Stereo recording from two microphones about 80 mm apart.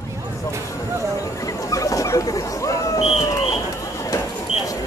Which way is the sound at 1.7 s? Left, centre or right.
Left.